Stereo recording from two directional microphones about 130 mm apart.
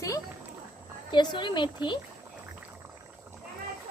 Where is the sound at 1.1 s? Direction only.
35° left (ahead or behind).